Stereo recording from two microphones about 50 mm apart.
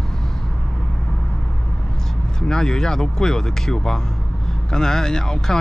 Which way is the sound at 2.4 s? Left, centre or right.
Centre.